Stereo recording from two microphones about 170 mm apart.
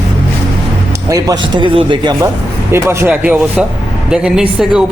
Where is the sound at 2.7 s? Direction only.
15° right (ahead or behind).